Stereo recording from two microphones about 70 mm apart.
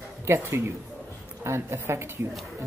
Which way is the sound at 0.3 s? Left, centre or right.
Right.